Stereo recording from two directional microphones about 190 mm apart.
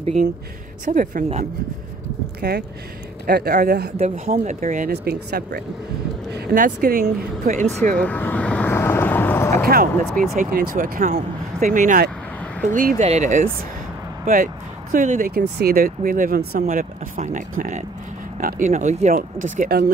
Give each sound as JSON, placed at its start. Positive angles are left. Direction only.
{"t": 0.8, "sound": "speech", "side_deg": -45}
{"t": 3.3, "sound": "speech", "side_deg": -55}
{"t": 4.0, "sound": "speech", "side_deg": -40}
{"t": 5.0, "sound": "speech", "side_deg": -55}
{"t": 8.0, "sound": "vehicle", "side_deg": 10}
{"t": 10.0, "sound": "speech", "side_deg": 0}
{"t": 10.4, "sound": "speech", "side_deg": -45}